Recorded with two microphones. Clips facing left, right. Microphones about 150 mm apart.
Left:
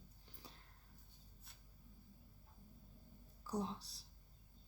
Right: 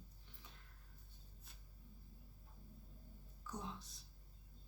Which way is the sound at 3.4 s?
35° left (ahead or behind).